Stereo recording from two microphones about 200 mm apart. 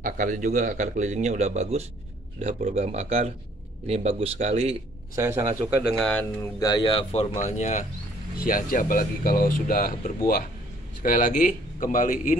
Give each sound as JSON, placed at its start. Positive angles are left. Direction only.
{"t": 0.0, "sound": "a man's voice", "side_deg": -40}
{"t": 5.1, "sound": "speech", "side_deg": -15}
{"t": 5.9, "sound": "speech", "side_deg": 5}
{"t": 6.6, "sound": "speech", "side_deg": 20}